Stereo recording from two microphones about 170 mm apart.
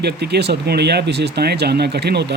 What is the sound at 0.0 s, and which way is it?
Speech, 75° right (ahead or behind).